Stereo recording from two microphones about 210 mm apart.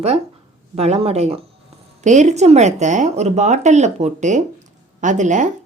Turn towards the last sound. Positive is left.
turn(degrees=-35)  # may be behind; listen again after turning